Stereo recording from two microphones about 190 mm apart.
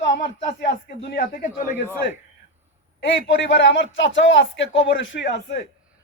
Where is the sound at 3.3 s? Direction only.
80° left; by 5.6 s 65° left (ahead or behind).